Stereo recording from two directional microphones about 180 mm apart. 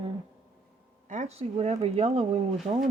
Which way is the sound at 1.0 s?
40° right (ahead or behind).